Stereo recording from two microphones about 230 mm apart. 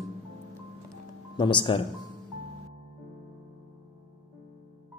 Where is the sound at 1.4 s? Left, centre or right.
Left.